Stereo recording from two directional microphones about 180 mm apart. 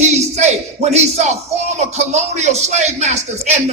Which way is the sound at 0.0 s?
40° right (ahead or behind).